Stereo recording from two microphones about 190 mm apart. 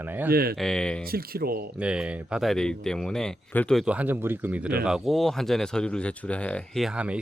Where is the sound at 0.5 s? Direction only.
5° left (ahead or behind).